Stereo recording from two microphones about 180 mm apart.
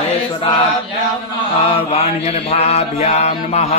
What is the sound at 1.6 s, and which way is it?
Mantra, 30° left (ahead or behind).